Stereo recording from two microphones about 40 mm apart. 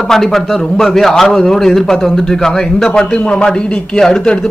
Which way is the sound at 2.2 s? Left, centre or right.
Centre.